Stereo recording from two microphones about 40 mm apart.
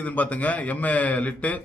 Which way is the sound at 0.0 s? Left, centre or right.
Left.